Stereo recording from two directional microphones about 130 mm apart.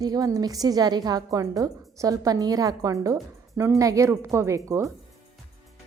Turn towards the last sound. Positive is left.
turn(degrees=-25)  # may be behind; listen again after turning